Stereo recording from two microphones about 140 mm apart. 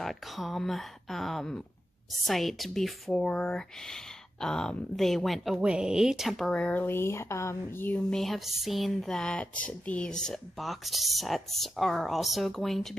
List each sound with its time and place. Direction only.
0.0 s speech: centre (ahead or behind)
8.1 s speech: centre (ahead or behind)